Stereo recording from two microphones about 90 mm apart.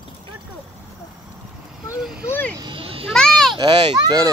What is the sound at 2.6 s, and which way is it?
Children playing, 80° right.